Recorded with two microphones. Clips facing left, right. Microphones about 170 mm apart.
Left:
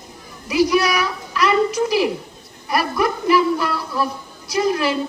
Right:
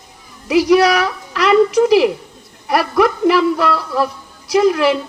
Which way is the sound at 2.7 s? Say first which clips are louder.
Right 5 dB; 70° right (ahead or behind).